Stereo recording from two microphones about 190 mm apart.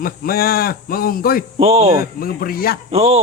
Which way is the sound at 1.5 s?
35° right (ahead or behind).